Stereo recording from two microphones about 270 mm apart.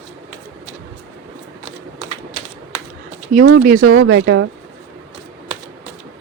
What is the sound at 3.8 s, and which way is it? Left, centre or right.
Speech, right.